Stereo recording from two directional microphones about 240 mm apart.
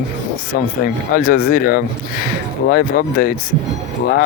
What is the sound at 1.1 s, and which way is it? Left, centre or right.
Speech, left.